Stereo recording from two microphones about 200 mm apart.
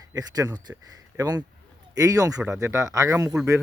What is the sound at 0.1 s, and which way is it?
Speech, 20° right (ahead or behind).